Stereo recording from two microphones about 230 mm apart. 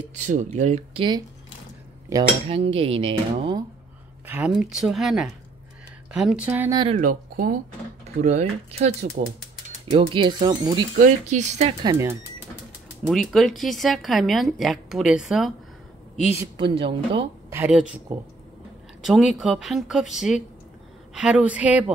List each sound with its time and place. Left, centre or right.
0.3 s cutlery: right
4.6 s a woman's voice: centre
7.0 s speech: right
8.2 s cutlery: right
11.0 s speech: right
11.8 s speech: centre
13.0 s a woman's voice: centre
16.3 s cutlery: right
17.5 s a woman's voice: centre
19.0 s a woman's voice: centre